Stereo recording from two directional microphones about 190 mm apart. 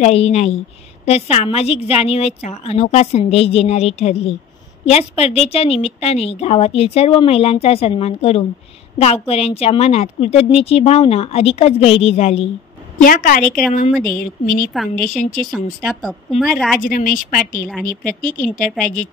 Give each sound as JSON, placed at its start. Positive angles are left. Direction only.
{"t": 0.0, "sound": "a woman's voice", "side_deg": 35}
{"t": 13.0, "sound": "a woman's voice", "side_deg": 50}
{"t": 15.5, "sound": "speech", "side_deg": 0}
{"t": 16.8, "sound": "a woman's voice", "side_deg": 45}